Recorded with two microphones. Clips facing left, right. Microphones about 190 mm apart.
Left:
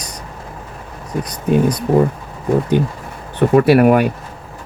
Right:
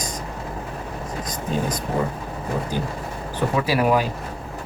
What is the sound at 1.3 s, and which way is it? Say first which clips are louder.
Speech: left 10 dB; 65° left (ahead or behind).